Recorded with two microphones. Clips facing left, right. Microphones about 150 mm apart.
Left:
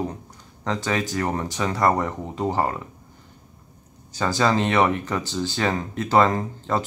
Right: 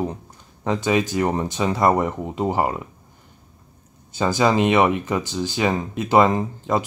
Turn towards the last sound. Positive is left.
turn(degrees=-15)  # may be behind; listen again after turning